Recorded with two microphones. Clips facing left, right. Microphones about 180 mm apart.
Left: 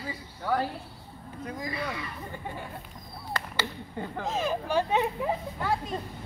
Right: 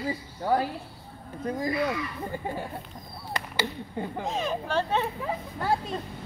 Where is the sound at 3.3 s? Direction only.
15° right (ahead or behind).